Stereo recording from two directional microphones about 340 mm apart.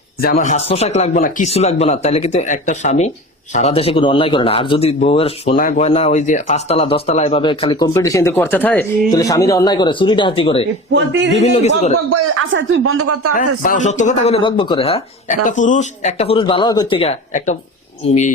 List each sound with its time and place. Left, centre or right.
0.2 s a man's voice: left
12.1 s speech: right
13.6 s a man's voice: left